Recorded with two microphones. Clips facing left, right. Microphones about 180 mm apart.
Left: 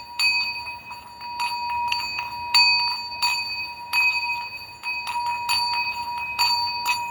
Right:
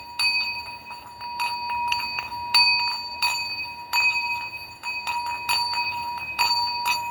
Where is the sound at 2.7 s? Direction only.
55° right (ahead or behind).